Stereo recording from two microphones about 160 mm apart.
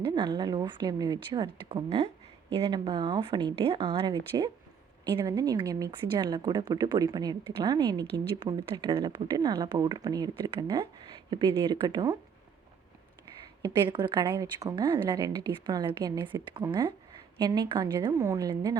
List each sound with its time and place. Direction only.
0.1 s speech: 25° right (ahead or behind)
13.8 s speech: 30° right (ahead or behind)